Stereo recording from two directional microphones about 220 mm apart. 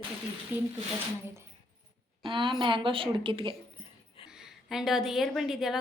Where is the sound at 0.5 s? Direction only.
10° right (ahead or behind).